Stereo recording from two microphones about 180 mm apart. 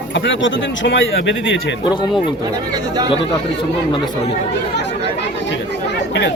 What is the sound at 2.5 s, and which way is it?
Speech, 25° right (ahead or behind).